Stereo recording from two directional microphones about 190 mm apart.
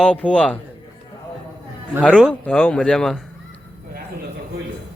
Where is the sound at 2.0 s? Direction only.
5° left (ahead or behind).